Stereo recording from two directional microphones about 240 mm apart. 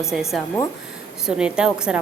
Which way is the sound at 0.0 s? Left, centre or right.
Centre.